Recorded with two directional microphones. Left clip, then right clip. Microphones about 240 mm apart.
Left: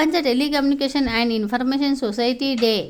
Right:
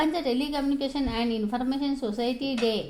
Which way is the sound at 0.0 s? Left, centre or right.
Left.